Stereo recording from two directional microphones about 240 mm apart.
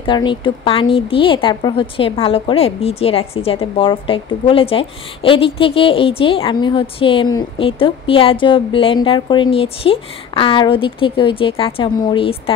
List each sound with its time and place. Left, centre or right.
0.0 s a woman's voice: centre